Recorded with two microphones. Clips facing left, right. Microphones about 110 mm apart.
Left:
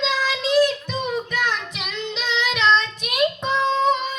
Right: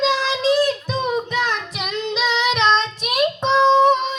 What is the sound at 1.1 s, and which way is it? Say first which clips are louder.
Music: right 4 dB; 25° right (ahead or behind).